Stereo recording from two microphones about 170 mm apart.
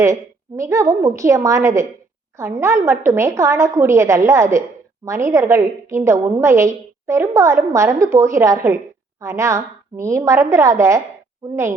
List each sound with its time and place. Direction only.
0.0 s a woman's voice: 20° right (ahead or behind)